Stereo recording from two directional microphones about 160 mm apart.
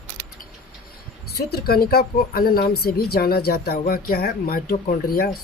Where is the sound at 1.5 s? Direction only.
75° left (ahead or behind).